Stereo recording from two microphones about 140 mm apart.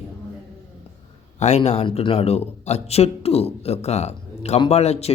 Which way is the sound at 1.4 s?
50° left (ahead or behind).